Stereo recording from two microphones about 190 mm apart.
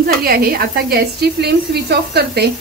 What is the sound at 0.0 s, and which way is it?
A woman's voice, 55° right (ahead or behind).